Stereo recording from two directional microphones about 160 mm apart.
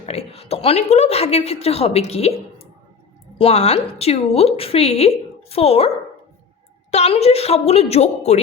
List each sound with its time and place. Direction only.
0.0 s a woman's voice: 40° left (ahead or behind)
6.9 s a woman's voice: 40° left (ahead or behind)